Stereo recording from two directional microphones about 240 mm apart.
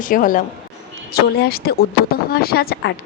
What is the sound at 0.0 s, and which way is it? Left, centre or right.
Speech, left.